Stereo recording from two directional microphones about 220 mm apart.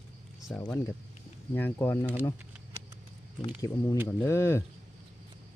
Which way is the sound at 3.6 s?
15° left (ahead or behind).